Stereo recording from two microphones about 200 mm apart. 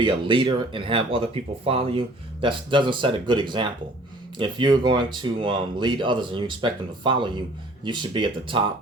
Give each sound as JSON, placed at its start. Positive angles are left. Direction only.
{"t": 0.0, "sound": "speech", "side_deg": -25}